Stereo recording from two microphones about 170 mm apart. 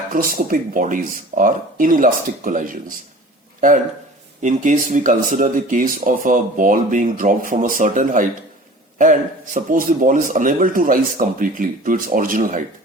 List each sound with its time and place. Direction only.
0.1 s speech: 55° right (ahead or behind)
4.4 s speech: 50° right (ahead or behind)